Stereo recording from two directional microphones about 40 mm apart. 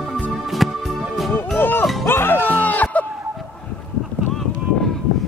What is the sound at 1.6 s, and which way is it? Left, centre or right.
Music, left.